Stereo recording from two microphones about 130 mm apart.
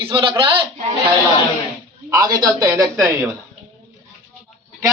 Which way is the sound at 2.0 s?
25° right (ahead or behind).